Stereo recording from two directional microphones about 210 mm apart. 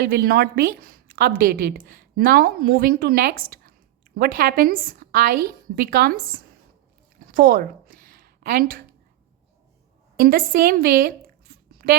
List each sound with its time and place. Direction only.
0.1 s a woman's voice: 45° right (ahead or behind)
7.2 s a sound: 40° right (ahead or behind)
10.2 s a woman's voice: 45° right (ahead or behind)